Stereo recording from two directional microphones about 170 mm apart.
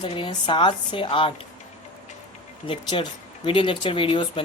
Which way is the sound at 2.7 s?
30° left (ahead or behind).